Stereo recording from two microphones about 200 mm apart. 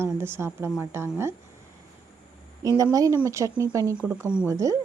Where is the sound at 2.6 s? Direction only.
15° right (ahead or behind).